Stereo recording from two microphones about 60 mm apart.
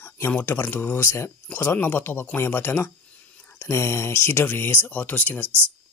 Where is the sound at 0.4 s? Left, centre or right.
Left.